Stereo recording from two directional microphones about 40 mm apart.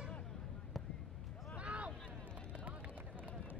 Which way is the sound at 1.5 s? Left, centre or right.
Right.